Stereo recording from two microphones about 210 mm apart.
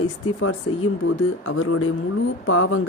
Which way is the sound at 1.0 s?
65° left (ahead or behind).